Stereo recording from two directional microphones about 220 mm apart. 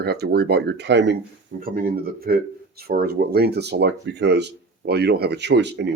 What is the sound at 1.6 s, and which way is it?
Speech, 40° right (ahead or behind).